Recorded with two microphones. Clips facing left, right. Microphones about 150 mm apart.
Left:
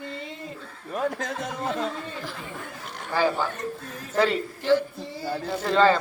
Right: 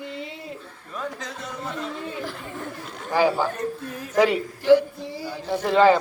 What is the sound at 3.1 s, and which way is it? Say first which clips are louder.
A man's voice: right 3 dB; 15° right (ahead or behind).